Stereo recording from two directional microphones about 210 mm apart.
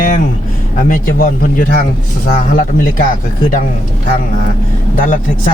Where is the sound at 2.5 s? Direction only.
45° left (ahead or behind).